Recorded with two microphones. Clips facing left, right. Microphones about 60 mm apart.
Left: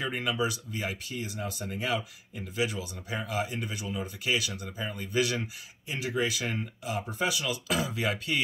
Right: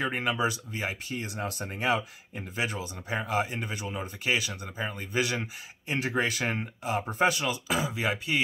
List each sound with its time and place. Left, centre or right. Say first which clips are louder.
0.0 s speech: right 2 dB; right
1.2 s speech: right 1 dB; right
5.9 s speech: right 2 dB; right
7.6 s speech: even; centre